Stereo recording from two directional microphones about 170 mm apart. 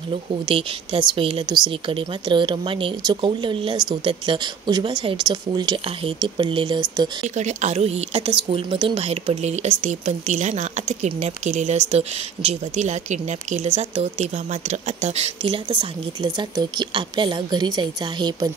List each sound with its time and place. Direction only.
0.5 s speech: 30° right (ahead or behind)
7.3 s speech: 45° right (ahead or behind); by 18.5 s 25° right (ahead or behind)